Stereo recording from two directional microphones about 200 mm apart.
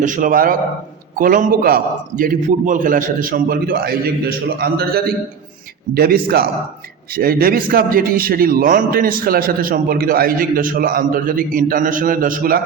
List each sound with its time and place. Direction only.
0.0 s a man's voice: 40° right (ahead or behind)